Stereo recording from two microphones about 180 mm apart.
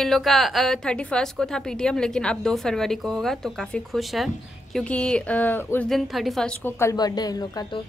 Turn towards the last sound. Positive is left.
turn(degrees=25)  # may be behind; listen again after turning